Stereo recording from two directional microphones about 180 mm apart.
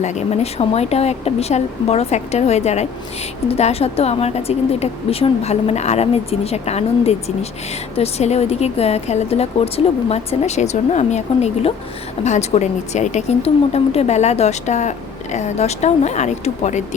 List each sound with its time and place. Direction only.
0.0 s speech: 40° left (ahead or behind)